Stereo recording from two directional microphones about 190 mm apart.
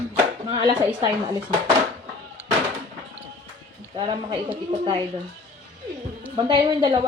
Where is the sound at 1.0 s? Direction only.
20° right (ahead or behind).